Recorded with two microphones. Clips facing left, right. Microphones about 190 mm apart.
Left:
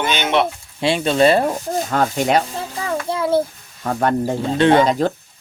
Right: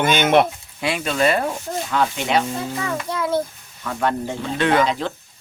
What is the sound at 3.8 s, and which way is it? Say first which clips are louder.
Rub: left 4 dB; 45° left (ahead or behind).